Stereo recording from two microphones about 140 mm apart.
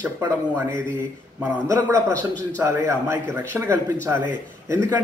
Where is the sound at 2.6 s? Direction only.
20° right (ahead or behind).